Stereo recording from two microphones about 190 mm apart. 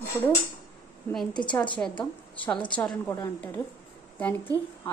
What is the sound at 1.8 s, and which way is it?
A woman's voice, 10° left (ahead or behind).